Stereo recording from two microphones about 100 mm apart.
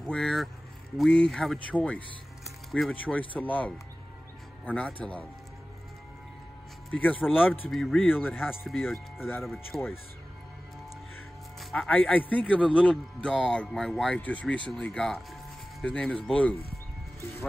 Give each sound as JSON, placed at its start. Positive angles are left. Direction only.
{"t": 0.0, "sound": "a man's voice", "side_deg": 5}
{"t": 6.9, "sound": "speech", "side_deg": 10}
{"t": 7.2, "sound": "a man's voice", "side_deg": -5}
{"t": 7.7, "sound": "a man's voice", "side_deg": 5}
{"t": 8.1, "sound": "speech", "side_deg": 20}
{"t": 8.4, "sound": "a man's voice", "side_deg": 0}
{"t": 11.9, "sound": "a man's voice", "side_deg": 15}